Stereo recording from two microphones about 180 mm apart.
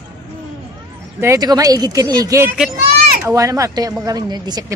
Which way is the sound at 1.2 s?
20° right (ahead or behind).